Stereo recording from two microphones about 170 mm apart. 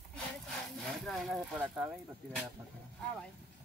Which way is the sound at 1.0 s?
Centre (ahead or behind).